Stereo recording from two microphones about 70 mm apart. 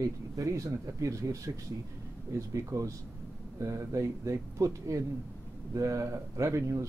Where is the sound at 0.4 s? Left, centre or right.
Right.